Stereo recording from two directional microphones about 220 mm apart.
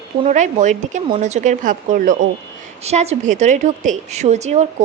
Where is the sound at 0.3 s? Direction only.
35° right (ahead or behind).